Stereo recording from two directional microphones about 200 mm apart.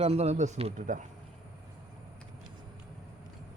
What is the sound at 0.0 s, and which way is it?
A man's voice, 30° right (ahead or behind).